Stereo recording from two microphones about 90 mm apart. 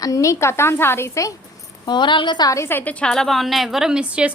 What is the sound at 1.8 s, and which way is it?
Speech, 60° left (ahead or behind).